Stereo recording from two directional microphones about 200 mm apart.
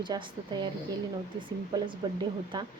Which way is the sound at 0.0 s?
25° right (ahead or behind).